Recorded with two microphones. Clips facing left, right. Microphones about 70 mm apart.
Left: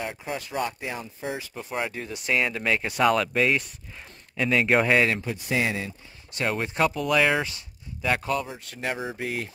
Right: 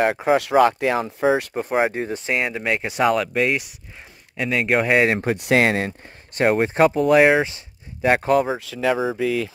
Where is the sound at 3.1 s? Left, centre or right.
Centre.